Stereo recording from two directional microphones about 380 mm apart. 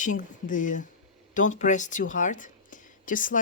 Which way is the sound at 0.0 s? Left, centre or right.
Centre.